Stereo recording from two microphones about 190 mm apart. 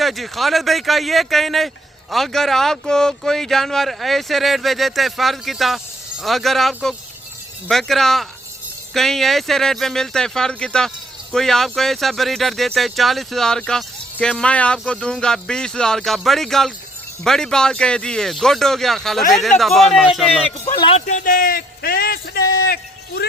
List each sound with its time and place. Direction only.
0.0 s speech: centre (ahead or behind)
20.7 s speech: 25° left (ahead or behind)
21.1 s a sound: 45° left (ahead or behind)